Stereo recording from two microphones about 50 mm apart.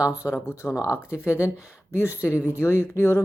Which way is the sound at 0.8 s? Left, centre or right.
Right.